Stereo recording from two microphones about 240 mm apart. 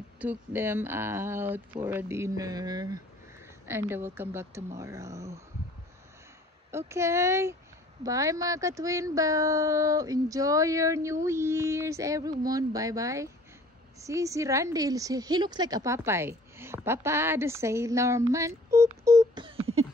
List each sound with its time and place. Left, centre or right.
0.2 s a woman's voice: centre
6.9 s a woman's voice: centre
18.7 s beatboxing: centre